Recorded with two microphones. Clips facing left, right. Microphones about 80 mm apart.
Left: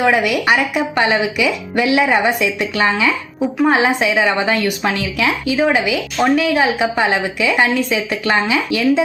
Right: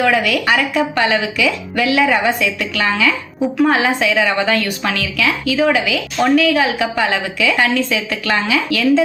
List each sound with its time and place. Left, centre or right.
0.0 s a woman's voice: left